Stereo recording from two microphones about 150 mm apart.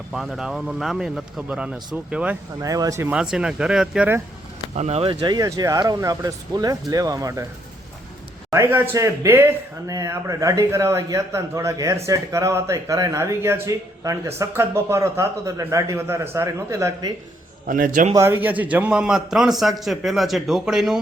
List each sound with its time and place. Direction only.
0.1 s a man's voice: centre (ahead or behind)
2.6 s speech: 25° right (ahead or behind)
3.1 s a man's voice: 5° right (ahead or behind)
4.7 s speech: 45° right (ahead or behind)
5.2 s speech: 25° right (ahead or behind)
8.4 s speech: 15° right (ahead or behind)
17.7 s a man's voice: 65° right (ahead or behind)
18.1 s a man's voice: 15° right (ahead or behind)